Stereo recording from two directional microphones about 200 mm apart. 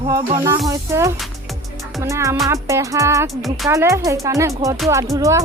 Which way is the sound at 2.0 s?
15° right (ahead or behind).